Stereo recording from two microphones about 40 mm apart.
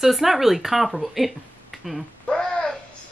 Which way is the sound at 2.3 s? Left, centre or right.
Left.